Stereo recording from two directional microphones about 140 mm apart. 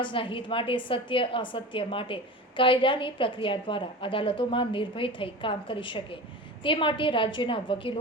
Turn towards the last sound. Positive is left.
turn(degrees=40)  # may be behind; listen again after turning